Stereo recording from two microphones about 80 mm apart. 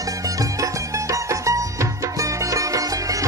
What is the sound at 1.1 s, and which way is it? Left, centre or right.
Music, right.